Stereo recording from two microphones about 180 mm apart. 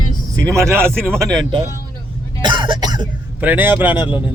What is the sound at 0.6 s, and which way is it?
Speech, 15° right (ahead or behind).